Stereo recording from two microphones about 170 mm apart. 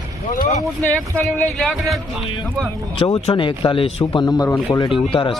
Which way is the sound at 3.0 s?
35° left (ahead or behind).